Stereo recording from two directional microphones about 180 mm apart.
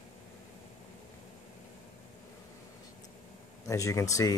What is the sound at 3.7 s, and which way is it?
Speech, 15° left (ahead or behind).